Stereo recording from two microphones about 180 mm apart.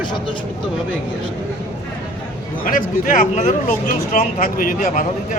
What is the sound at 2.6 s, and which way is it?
Speech, 50° left (ahead or behind).